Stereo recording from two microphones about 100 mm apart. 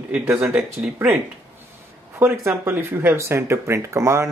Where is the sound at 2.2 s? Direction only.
25° right (ahead or behind).